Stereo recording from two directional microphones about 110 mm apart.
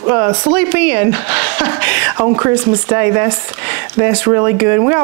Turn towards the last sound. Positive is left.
turn(degrees=-25)  # may be behind; listen again after turning